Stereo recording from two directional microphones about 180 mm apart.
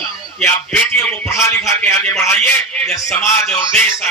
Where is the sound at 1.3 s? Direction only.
15° left (ahead or behind).